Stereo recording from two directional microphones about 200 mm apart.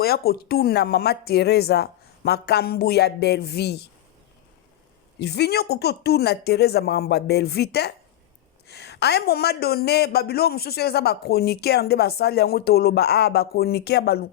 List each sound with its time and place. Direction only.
0.0 s speech: 50° left (ahead or behind)
5.2 s speech: 55° left (ahead or behind)